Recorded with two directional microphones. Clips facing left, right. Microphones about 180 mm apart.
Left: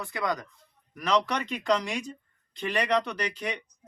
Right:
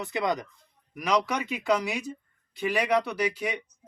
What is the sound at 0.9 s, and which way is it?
Speech, 10° right (ahead or behind).